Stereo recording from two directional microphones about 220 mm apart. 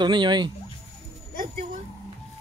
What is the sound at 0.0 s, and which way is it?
Speech, 20° right (ahead or behind).